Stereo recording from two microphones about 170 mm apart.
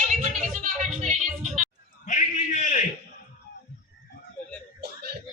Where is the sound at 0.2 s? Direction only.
50° right (ahead or behind).